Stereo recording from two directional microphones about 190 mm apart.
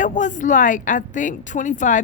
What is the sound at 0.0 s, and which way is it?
A woman's voice, 40° left (ahead or behind).